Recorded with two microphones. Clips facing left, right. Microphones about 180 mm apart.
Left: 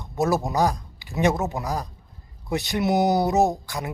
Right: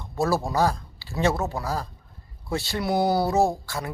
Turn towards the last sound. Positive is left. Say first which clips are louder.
# left 1 dB
turn(degrees=20)  # may be behind; listen again after turning